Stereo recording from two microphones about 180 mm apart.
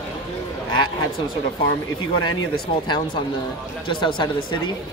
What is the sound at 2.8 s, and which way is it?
Speech, 25° left (ahead or behind).